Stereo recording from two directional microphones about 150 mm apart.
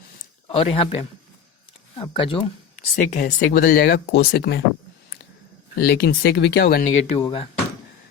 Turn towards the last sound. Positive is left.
turn(degrees=40)  # may be behind; listen again after turning